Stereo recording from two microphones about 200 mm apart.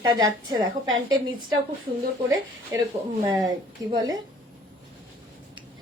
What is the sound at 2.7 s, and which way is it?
A woman's voice, 15° right (ahead or behind).